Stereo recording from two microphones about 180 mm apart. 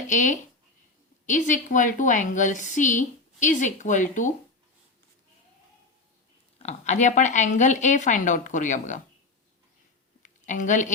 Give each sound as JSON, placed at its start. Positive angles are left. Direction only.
{"t": 0.1, "sound": "a woman's voice", "side_deg": 45}
{"t": 6.6, "sound": "a woman's voice", "side_deg": 40}
{"t": 10.2, "sound": "a woman's voice", "side_deg": 45}